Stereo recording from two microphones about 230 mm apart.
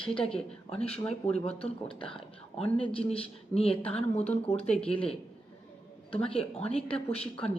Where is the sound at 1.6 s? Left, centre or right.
Left.